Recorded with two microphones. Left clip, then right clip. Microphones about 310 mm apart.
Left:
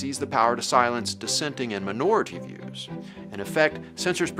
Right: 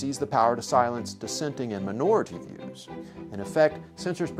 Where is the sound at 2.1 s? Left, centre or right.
Right.